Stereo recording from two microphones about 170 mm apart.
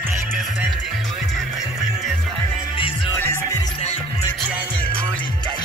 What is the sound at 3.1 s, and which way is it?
Music, 15° left (ahead or behind).